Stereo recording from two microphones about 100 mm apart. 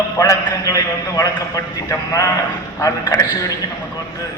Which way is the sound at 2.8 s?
35° left (ahead or behind).